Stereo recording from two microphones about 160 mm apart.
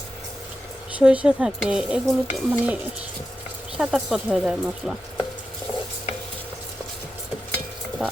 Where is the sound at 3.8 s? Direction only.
5° right (ahead or behind).